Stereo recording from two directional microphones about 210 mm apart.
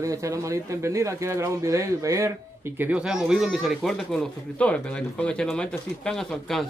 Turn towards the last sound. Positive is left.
turn(degrees=0)  # may be behind; listen again after turning